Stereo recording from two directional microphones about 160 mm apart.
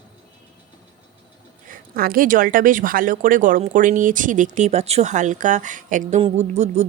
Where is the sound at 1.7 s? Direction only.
65° right (ahead or behind); by 6.8 s 45° right (ahead or behind).